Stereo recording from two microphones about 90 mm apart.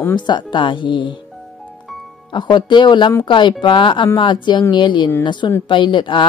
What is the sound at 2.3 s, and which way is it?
Speech, 60° left (ahead or behind).